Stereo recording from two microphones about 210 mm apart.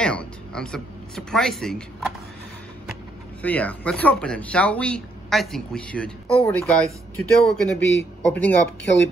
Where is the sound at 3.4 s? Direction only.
5° left (ahead or behind).